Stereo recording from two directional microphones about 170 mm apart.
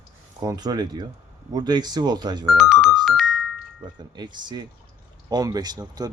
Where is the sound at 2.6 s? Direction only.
Centre (ahead or behind).